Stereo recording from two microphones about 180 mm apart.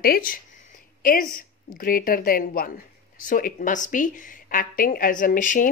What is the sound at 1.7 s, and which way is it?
Speech, 55° left (ahead or behind).